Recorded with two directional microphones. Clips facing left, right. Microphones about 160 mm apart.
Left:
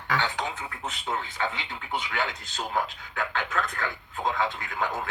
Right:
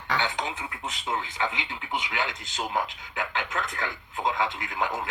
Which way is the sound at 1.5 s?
15° right (ahead or behind).